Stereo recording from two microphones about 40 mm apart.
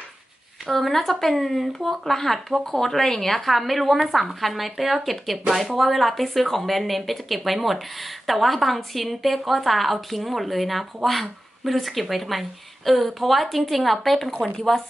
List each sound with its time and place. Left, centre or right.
0.7 s speech: centre